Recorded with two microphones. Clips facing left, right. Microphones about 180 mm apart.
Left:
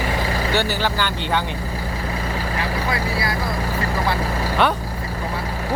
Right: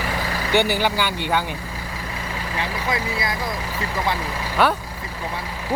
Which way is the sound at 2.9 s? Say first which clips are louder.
Right 1 dB; 20° right (ahead or behind).